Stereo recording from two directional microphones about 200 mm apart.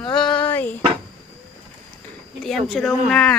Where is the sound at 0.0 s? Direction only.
25° left (ahead or behind).